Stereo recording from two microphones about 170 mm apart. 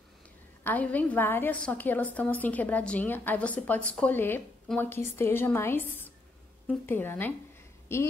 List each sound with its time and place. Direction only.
0.7 s a woman's voice: 10° left (ahead or behind)